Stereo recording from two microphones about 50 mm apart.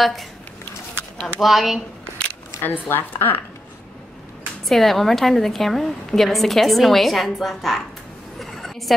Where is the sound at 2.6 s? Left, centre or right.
Left.